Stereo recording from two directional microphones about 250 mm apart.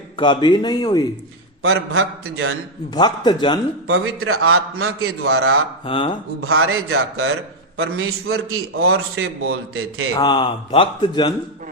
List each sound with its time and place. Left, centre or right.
0.2 s speech: centre
1.6 s a man's voice: right
2.9 s speech: centre
3.8 s a man's voice: right
5.8 s speech: left
6.4 s a man's voice: right
10.2 s speech: centre